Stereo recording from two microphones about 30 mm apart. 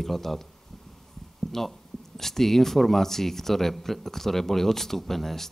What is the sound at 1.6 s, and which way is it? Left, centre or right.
Speech, centre.